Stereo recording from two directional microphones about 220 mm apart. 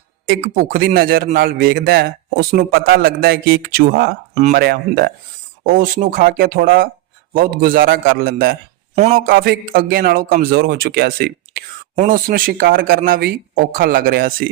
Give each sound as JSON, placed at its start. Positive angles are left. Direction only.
{"t": 0.3, "sound": "a man's voice", "side_deg": -40}